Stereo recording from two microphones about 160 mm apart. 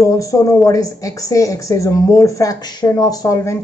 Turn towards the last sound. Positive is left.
turn(degrees=20)  # may be behind; listen again after turning